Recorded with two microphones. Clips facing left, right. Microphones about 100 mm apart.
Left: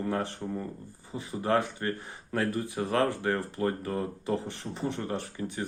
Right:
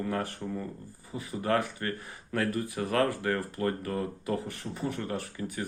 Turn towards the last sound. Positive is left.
turn(degrees=25)  # may be behind; listen again after turning